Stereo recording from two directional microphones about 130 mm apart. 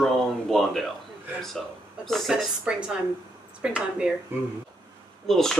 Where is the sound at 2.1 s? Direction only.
Centre (ahead or behind).